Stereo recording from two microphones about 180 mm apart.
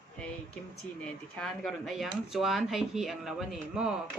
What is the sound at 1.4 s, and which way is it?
Speech, centre (ahead or behind).